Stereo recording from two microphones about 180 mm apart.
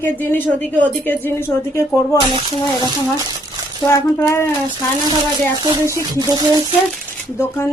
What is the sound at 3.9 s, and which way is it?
A woman's voice, 15° left (ahead or behind).